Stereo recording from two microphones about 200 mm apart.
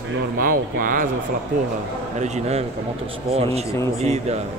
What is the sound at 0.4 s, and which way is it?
Speech, 45° right (ahead or behind).